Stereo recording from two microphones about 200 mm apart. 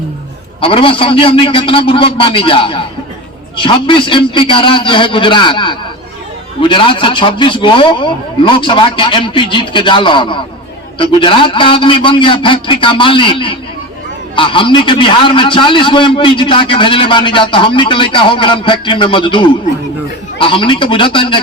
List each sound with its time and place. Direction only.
0.6 s a man's voice: 25° left (ahead or behind)